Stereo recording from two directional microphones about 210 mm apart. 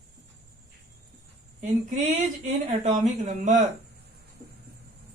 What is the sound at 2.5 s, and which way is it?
Speech, 35° right (ahead or behind).